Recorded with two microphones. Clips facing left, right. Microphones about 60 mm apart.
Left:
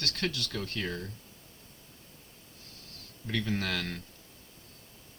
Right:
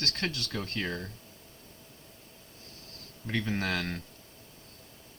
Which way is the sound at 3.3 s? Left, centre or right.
Right.